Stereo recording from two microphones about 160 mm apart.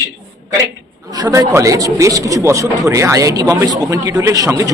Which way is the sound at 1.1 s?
20° right (ahead or behind).